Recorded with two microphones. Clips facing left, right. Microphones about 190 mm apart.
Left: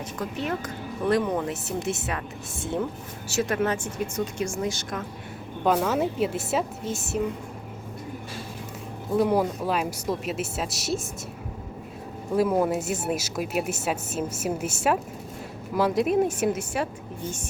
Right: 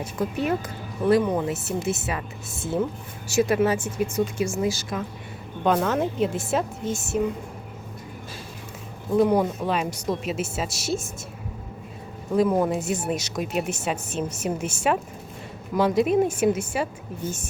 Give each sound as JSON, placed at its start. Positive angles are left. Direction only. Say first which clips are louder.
{"t": 0.0, "sound": "speech", "louder": "right 4 dB", "side_deg": -10}
{"t": 9.1, "sound": "speech", "louder": "right 2 dB", "side_deg": 0}
{"t": 12.4, "sound": "speech", "louder": "right 1 dB", "side_deg": 5}